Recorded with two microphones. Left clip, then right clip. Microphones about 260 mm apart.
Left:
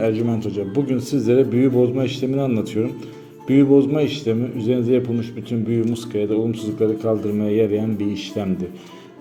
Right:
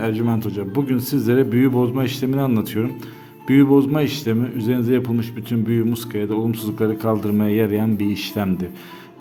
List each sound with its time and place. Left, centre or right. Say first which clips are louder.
0.0 s speech: left 2 dB; centre